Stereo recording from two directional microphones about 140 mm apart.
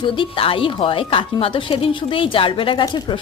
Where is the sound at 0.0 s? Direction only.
40° left (ahead or behind).